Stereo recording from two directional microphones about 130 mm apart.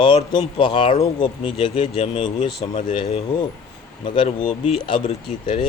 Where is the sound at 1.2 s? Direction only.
40° left (ahead or behind).